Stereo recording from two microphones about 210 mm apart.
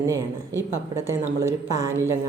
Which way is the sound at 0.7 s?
15° right (ahead or behind).